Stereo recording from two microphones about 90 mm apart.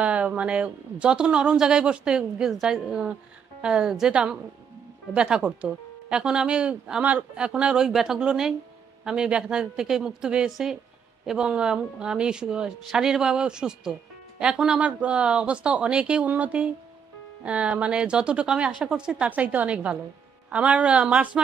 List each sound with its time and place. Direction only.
0.0 s speech: 15° right (ahead or behind)